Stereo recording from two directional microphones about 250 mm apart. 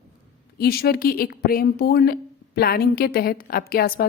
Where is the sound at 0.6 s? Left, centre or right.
Left.